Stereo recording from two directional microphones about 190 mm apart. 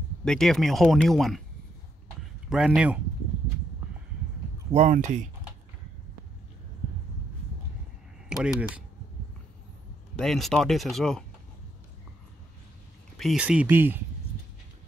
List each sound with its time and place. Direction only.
0.2 s speech: 5° left (ahead or behind)
2.5 s speech: 5° right (ahead or behind)
4.7 s speech: 40° right (ahead or behind)
8.3 s speech: 5° right (ahead or behind)
10.1 s speech: centre (ahead or behind)
13.2 s speech: 5° right (ahead or behind)